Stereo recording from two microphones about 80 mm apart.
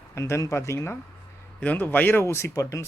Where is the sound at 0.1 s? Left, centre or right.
Left.